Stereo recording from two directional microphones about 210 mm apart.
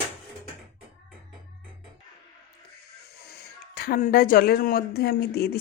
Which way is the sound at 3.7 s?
45° left (ahead or behind).